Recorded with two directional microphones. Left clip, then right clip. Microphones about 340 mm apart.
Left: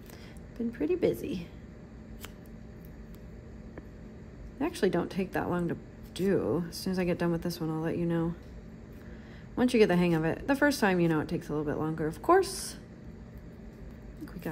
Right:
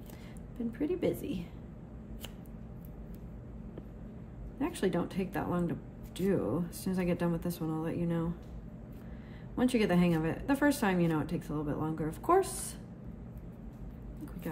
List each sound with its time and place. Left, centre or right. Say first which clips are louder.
0.7 s a woman's voice: left 4 dB; left
4.6 s a woman's voice: left 4 dB; left
9.6 s a woman's voice: left 5 dB; left